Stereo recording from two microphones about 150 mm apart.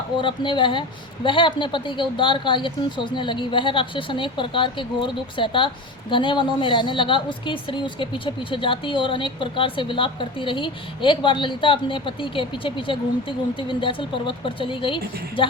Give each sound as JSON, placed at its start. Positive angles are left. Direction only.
{"t": 0.2, "sound": "a woman's voice", "side_deg": 35}